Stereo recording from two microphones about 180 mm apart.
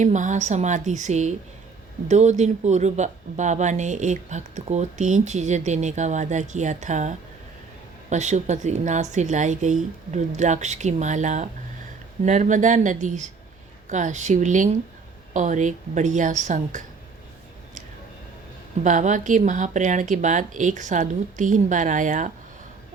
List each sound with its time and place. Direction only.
0.0 s speech: 40° right (ahead or behind)
8.1 s speech: 40° right (ahead or behind)
18.8 s speech: 45° right (ahead or behind)